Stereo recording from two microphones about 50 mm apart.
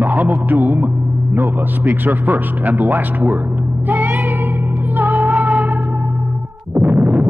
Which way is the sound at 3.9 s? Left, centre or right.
Right.